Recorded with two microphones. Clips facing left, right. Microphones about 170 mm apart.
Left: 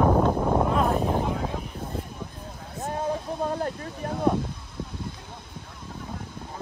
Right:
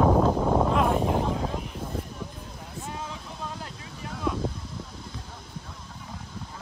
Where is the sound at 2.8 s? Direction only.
50° left (ahead or behind).